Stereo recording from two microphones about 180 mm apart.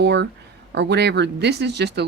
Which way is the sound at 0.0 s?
75° right (ahead or behind).